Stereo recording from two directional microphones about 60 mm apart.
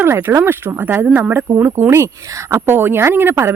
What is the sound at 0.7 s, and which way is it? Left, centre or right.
A woman's voice, right.